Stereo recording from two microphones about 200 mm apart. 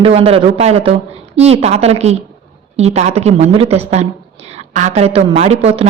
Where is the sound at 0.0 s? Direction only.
30° right (ahead or behind).